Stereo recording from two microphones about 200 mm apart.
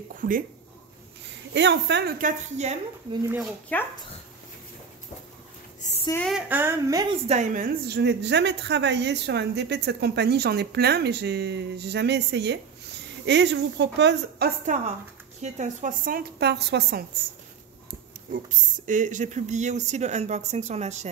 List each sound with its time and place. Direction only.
0.1 s speech: 40° right (ahead or behind)
1.5 s a woman's voice: 60° right (ahead or behind); by 2.8 s 35° right (ahead or behind)
3.7 s speech: 10° left (ahead or behind)
5.8 s a sound: 35° left (ahead or behind)
6.1 s speech: centre (ahead or behind)
6.5 s a woman's voice: 15° right (ahead or behind)
7.2 s a woman's voice: 40° right (ahead or behind); by 14.5 s 60° right (ahead or behind)
14.7 s a woman's voice: 40° right (ahead or behind); by 17.0 s 55° right (ahead or behind)
18.3 s speech: 40° right (ahead or behind)